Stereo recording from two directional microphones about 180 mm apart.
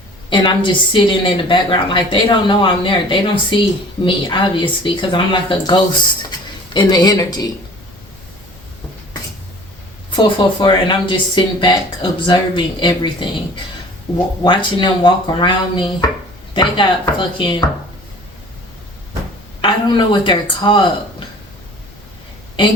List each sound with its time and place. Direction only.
0.3 s speech: 25° left (ahead or behind)
10.1 s speech: 25° left (ahead or behind)
14.4 s speech: 25° left (ahead or behind)
19.6 s speech: 25° left (ahead or behind)